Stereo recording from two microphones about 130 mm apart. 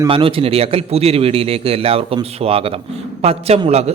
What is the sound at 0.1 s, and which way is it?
A man's voice, 45° right (ahead or behind).